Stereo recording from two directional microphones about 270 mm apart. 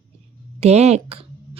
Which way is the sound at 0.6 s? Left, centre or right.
Right.